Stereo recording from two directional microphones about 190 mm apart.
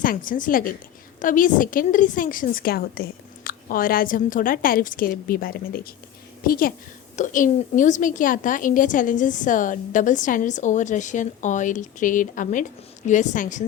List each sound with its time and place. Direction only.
0.0 s a woman's voice: 45° left (ahead or behind)